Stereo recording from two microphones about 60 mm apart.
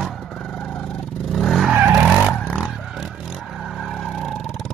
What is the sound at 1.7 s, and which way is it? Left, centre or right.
Vehicle, centre.